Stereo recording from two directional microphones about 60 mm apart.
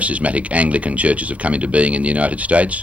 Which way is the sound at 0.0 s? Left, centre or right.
Right.